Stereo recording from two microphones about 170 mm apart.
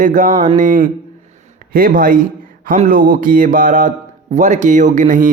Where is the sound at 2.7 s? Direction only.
55° right (ahead or behind).